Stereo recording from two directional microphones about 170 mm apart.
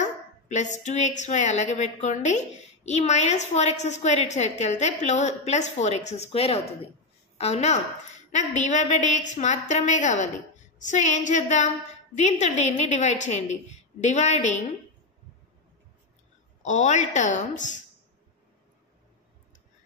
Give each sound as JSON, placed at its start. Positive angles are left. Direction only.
{"t": 0.0, "sound": "a woman's voice", "side_deg": 45}
{"t": 16.6, "sound": "speech", "side_deg": 45}